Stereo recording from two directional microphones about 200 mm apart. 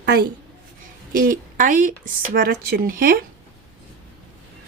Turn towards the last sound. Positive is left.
turn(degrees=-45)  # may be behind; listen again after turning